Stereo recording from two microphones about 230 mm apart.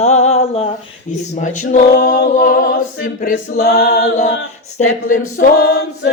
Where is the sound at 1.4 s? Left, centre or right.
Left.